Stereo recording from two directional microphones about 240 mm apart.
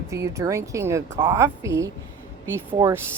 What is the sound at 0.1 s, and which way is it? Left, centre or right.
Speech, centre.